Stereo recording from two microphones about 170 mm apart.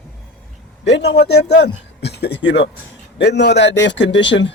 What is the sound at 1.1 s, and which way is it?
Speech, 75° left (ahead or behind).